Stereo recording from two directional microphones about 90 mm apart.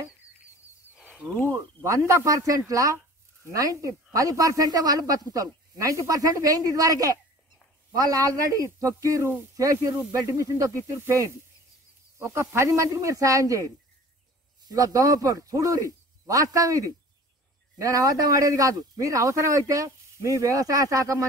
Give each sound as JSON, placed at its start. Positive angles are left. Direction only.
{"t": 1.5, "sound": "cricket", "side_deg": -35}
{"t": 2.0, "sound": "speech", "side_deg": -35}
{"t": 12.2, "sound": "speech", "side_deg": -30}
{"t": 14.7, "sound": "speech", "side_deg": -40}